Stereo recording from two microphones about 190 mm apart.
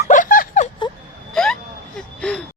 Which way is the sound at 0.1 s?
45° left (ahead or behind).